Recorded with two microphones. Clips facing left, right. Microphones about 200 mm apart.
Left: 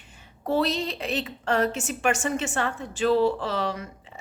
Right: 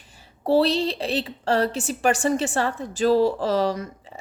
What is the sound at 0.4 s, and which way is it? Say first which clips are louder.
A woman's voice: right 5 dB; 30° right (ahead or behind).